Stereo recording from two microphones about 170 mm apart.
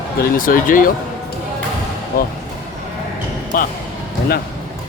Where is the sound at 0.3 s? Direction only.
55° left (ahead or behind).